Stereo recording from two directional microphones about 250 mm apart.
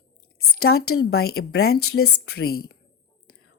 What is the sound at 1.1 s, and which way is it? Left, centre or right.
Speech, left.